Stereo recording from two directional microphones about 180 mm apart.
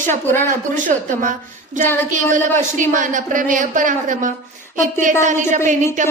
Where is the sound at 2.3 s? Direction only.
45° right (ahead or behind).